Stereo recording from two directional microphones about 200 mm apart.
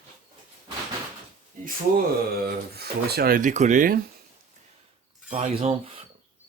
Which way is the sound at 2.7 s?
50° right (ahead or behind).